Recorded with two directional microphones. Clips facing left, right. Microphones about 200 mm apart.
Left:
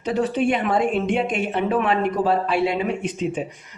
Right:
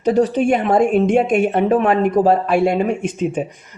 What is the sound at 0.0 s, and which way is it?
Speech, 40° right (ahead or behind).